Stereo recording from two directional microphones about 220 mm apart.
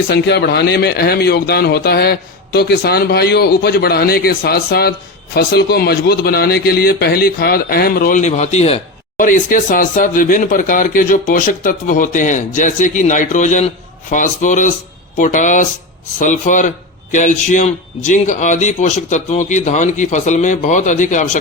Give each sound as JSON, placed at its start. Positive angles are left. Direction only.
{"t": 0.1, "sound": "a man's voice", "side_deg": 50}